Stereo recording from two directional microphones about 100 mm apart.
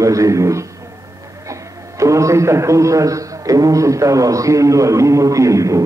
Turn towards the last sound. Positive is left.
turn(degrees=-30)  # may be behind; listen again after turning